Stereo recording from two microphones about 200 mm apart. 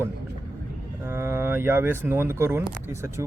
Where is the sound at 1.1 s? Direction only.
10° right (ahead or behind).